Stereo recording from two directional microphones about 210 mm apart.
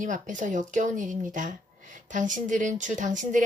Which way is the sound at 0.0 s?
35° right (ahead or behind).